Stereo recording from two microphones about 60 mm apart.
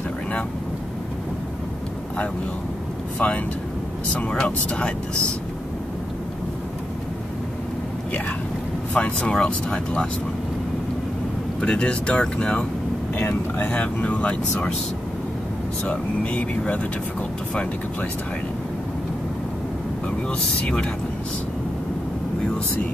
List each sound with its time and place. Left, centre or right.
3.2 s speech: left
8.9 s speech: left
9.3 s speech: centre
11.6 s speech: centre
13.1 s speech: left
13.7 s speech: left
15.8 s speech: left
20.2 s speech: centre